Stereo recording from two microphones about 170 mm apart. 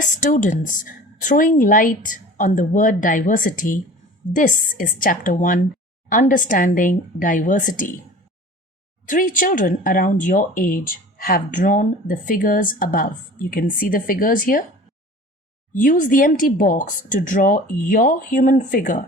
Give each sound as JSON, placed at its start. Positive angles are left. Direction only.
{"t": 0.2, "sound": "speech", "side_deg": 50}
{"t": 9.0, "sound": "speech", "side_deg": 50}
{"t": 15.7, "sound": "speech", "side_deg": 50}